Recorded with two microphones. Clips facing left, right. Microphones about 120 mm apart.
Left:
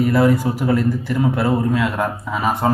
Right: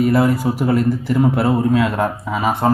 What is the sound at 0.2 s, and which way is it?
Speech, centre (ahead or behind).